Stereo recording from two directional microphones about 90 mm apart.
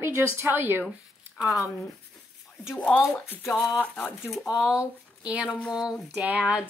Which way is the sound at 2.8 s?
10° left (ahead or behind).